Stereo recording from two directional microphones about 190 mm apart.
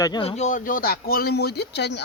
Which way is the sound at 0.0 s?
25° left (ahead or behind).